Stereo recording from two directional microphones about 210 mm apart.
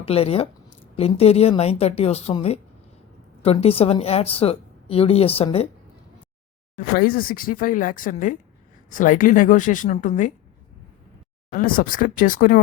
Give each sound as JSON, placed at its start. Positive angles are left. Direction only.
{"t": 0.0, "sound": "a woman's voice", "side_deg": 30}
{"t": 6.7, "sound": "speech", "side_deg": 45}
{"t": 11.5, "sound": "speech", "side_deg": 40}